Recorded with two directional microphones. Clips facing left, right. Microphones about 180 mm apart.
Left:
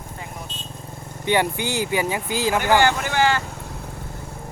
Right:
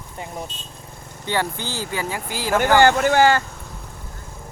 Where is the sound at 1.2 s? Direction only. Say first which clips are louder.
Left 4 dB; 15° left (ahead or behind).